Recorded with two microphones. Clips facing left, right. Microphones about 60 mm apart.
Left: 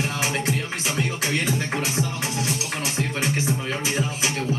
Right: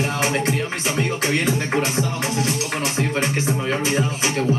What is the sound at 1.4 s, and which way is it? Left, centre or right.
Speech, centre.